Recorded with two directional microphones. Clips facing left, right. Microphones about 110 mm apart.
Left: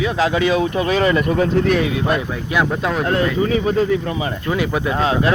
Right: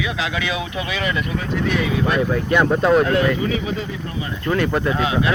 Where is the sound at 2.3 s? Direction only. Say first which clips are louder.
Right 3 dB; 5° left (ahead or behind).